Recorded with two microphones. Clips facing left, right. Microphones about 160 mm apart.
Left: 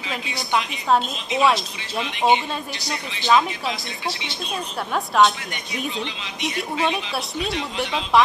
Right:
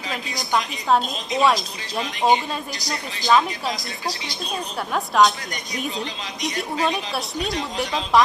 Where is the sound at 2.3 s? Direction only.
40° right (ahead or behind).